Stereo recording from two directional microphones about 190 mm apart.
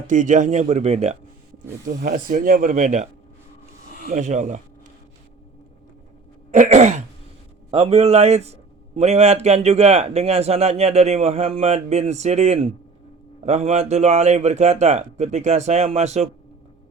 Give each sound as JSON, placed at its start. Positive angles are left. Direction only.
{"t": 0.1, "sound": "speech", "side_deg": -40}
{"t": 2.0, "sound": "speech", "side_deg": -45}
{"t": 6.5, "sound": "speech", "side_deg": -40}